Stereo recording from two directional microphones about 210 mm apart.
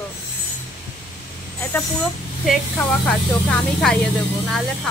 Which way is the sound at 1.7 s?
10° left (ahead or behind).